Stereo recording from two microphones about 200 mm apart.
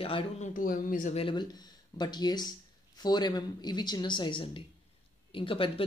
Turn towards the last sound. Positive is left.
turn(degrees=25)  # may be behind; listen again after turning